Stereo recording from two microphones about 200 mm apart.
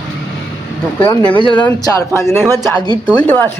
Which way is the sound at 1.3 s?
25° left (ahead or behind).